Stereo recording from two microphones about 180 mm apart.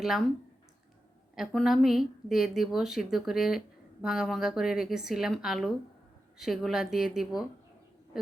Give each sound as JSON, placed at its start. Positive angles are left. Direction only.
{"t": 0.0, "sound": "a woman's voice", "side_deg": 0}
{"t": 1.4, "sound": "a woman's voice", "side_deg": 0}